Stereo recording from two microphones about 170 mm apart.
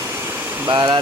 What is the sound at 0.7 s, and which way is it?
Speech, 25° right (ahead or behind).